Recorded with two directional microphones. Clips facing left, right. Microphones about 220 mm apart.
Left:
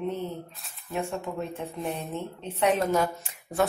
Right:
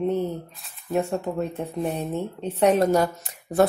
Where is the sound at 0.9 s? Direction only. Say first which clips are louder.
Right 6 dB; 35° right (ahead or behind).